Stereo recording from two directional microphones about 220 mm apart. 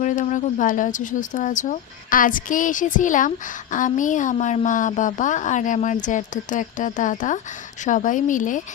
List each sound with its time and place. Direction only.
0.0 s speech: 35° left (ahead or behind)